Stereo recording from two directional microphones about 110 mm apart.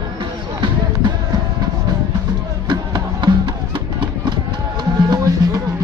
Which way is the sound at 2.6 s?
40° right (ahead or behind).